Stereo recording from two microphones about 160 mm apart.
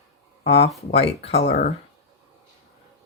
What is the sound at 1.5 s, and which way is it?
Speech, 55° left (ahead or behind).